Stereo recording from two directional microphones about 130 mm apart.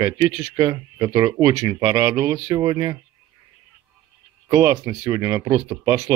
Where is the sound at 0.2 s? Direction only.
25° right (ahead or behind).